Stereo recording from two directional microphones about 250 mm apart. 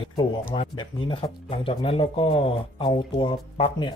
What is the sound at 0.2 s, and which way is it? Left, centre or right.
Speech, centre.